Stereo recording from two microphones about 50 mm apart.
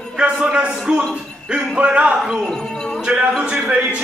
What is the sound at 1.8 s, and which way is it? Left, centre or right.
Speech, right.